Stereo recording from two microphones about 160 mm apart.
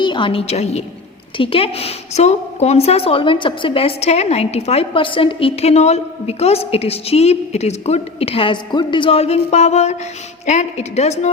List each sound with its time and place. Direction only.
0.0 s a woman's voice: 30° left (ahead or behind)